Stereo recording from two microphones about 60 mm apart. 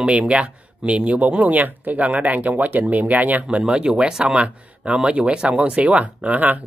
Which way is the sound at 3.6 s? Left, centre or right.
Centre.